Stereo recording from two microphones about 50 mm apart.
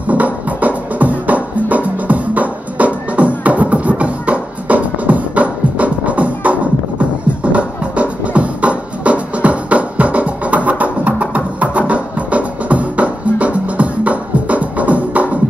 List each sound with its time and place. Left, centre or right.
0.1 s music: right